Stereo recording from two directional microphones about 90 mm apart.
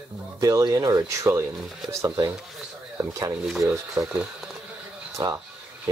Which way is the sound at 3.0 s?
35° right (ahead or behind).